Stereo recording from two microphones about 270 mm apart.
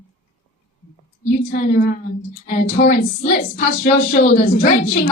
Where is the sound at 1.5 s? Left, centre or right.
Left.